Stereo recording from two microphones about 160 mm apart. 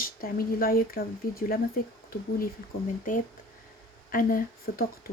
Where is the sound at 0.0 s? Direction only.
65° left (ahead or behind).